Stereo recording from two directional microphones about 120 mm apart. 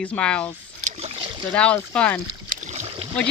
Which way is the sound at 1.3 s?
40° right (ahead or behind).